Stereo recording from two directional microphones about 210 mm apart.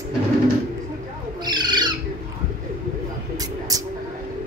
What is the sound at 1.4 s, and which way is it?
Bird, 20° right (ahead or behind).